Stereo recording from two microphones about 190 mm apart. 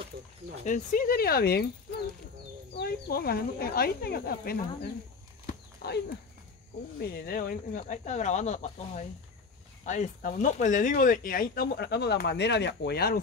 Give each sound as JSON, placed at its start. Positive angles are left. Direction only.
{"t": 0.7, "sound": "speech", "side_deg": 45}
{"t": 2.7, "sound": "speech", "side_deg": 55}
{"t": 5.5, "sound": "horse", "side_deg": 55}
{"t": 7.0, "sound": "speech", "side_deg": 50}